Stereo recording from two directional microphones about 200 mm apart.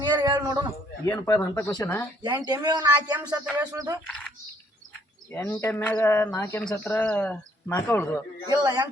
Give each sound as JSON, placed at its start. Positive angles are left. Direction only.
{"t": 0.0, "sound": "a sound", "side_deg": -20}
{"t": 1.0, "sound": "speech", "side_deg": 10}
{"t": 2.2, "sound": "speech", "side_deg": -20}
{"t": 4.0, "sound": "speech", "side_deg": 5}
{"t": 5.3, "sound": "speech", "side_deg": 15}
{"t": 8.4, "sound": "speech", "side_deg": -20}